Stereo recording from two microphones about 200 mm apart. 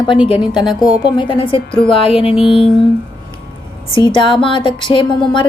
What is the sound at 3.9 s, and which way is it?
A woman's voice, 25° left (ahead or behind).